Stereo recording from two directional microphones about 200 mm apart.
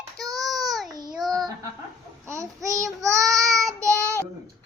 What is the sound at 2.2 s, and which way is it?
Child singing, 15° right (ahead or behind).